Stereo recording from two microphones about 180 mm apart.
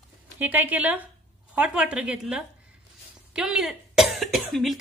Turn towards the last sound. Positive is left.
turn(degrees=0)  # may be behind; listen again after turning